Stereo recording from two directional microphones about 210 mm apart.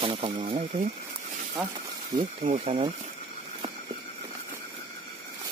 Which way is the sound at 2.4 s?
30° right (ahead or behind).